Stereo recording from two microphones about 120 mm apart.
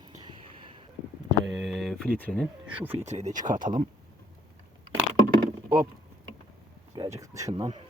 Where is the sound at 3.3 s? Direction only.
90° right.